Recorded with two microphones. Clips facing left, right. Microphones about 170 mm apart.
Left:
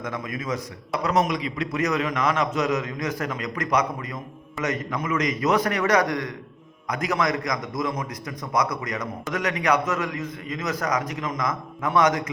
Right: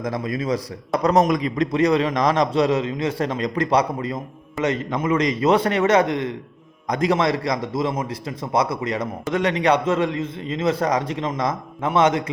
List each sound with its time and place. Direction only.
0.0 s a man's voice: 35° right (ahead or behind)